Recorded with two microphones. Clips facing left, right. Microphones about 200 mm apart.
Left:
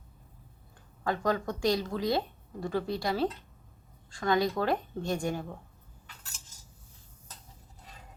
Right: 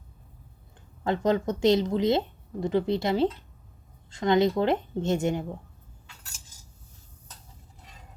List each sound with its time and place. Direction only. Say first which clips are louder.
1.0 s a woman's voice: right 5 dB; 20° right (ahead or behind)